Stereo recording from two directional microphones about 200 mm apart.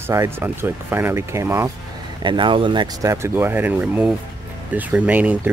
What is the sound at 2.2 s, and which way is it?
Speech, 25° right (ahead or behind).